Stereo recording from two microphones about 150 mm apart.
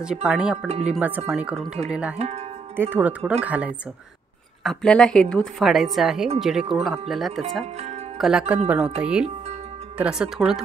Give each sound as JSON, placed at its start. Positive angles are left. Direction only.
{"t": 0.0, "sound": "a woman's voice", "side_deg": -5}
{"t": 0.7, "sound": "speech", "side_deg": -45}
{"t": 1.3, "sound": "a woman's voice", "side_deg": 0}
{"t": 2.1, "sound": "speech", "side_deg": -45}
{"t": 2.7, "sound": "speech", "side_deg": -15}
{"t": 4.6, "sound": "a woman's voice", "side_deg": 5}
{"t": 7.6, "sound": "speech", "side_deg": -45}
{"t": 8.2, "sound": "a woman's voice", "side_deg": -5}